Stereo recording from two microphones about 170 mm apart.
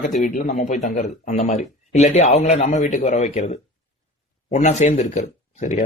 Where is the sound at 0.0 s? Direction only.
50° left (ahead or behind).